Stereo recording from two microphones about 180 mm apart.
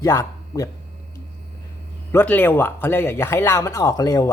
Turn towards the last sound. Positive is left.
turn(degrees=20)  # may be behind; listen again after turning